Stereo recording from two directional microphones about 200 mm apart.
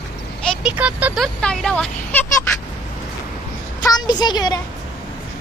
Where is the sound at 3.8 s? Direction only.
20° left (ahead or behind).